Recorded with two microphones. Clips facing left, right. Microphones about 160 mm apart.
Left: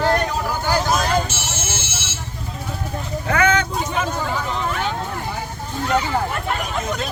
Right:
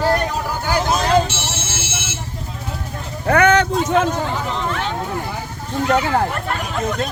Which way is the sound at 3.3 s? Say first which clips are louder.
Right 5 dB; 65° right (ahead or behind).